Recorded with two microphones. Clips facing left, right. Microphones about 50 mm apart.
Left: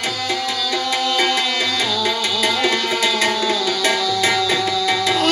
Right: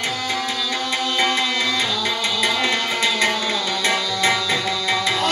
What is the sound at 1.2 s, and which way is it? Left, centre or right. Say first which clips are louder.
Music: right 1 dB; right.